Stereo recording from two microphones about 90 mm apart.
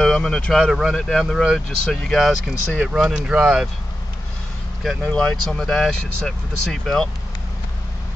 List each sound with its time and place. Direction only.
0.0 s speech: 5° left (ahead or behind)
2.8 s speech: 5° right (ahead or behind)
5.0 s speech: 10° left (ahead or behind)